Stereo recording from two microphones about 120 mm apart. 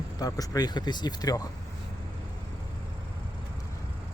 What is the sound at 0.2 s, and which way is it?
Speech, 30° left (ahead or behind).